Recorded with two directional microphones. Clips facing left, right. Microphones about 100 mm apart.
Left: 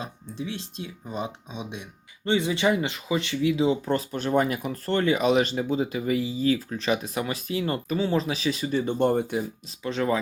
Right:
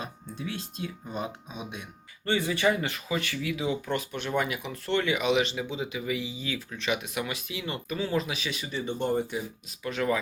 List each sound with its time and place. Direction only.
0.0 s speech: 25° left (ahead or behind); by 9.4 s 50° left (ahead or behind)
9.6 s speech: 30° left (ahead or behind)